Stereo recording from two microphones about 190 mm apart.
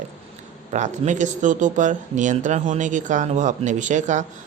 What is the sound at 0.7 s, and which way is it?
Speech, 40° right (ahead or behind).